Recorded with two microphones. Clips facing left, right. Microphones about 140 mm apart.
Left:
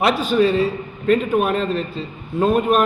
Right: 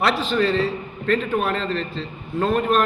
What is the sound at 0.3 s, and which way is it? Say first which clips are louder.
A man's voice: left 4 dB; 10° left (ahead or behind).